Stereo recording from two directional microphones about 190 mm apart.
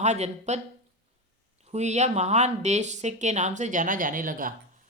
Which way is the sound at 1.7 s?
35° right (ahead or behind).